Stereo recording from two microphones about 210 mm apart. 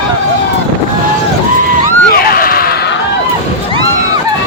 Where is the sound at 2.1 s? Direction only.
45° left (ahead or behind).